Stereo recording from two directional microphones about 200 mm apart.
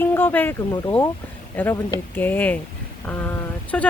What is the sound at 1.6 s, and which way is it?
Speech, 10° left (ahead or behind).